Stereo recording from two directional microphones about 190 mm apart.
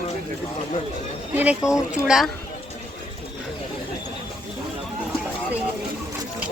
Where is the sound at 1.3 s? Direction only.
5° right (ahead or behind).